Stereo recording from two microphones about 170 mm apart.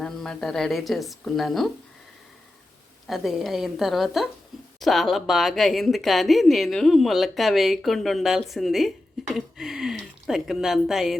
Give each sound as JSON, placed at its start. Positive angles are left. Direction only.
{"t": 0.0, "sound": "speech", "side_deg": 5}
{"t": 3.1, "sound": "speech", "side_deg": 0}